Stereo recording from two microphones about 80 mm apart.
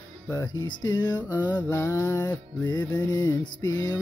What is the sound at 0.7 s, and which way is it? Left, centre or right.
Music, left.